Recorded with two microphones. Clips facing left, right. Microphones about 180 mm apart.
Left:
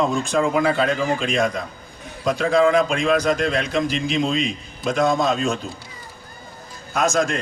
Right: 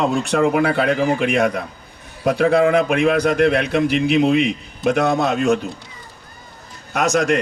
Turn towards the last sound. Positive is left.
turn(degrees=-70)  # may be behind; listen again after turning